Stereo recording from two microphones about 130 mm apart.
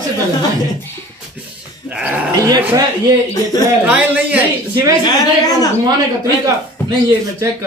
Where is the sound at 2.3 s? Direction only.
30° right (ahead or behind).